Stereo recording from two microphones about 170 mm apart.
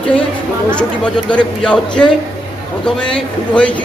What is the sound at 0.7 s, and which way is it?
Speech, 5° left (ahead or behind).